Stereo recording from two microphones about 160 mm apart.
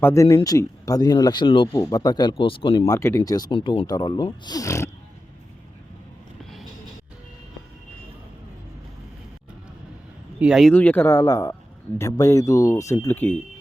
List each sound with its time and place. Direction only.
0.0 s speech: 20° left (ahead or behind)
1.7 s speech: 20° left (ahead or behind)
2.8 s speech: 20° left (ahead or behind)
6.4 s music: centre (ahead or behind)
10.4 s speech: centre (ahead or behind)